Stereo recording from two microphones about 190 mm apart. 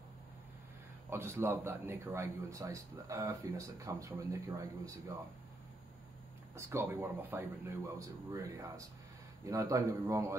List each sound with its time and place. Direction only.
1.1 s speech: 10° right (ahead or behind)
6.5 s speech: 15° right (ahead or behind)